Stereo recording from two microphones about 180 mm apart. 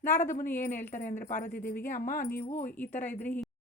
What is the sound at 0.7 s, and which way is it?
Speech, 10° left (ahead or behind).